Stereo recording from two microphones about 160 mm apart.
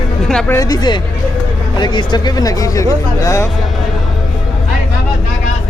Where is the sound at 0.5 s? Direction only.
25° left (ahead or behind).